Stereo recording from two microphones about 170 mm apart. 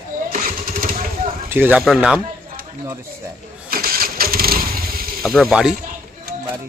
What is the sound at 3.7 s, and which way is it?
Engine starting, 60° right (ahead or behind).